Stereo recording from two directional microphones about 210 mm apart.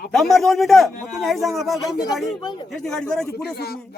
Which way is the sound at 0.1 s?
Centre (ahead or behind).